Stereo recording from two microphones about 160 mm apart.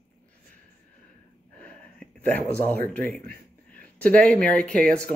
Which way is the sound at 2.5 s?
10° left (ahead or behind).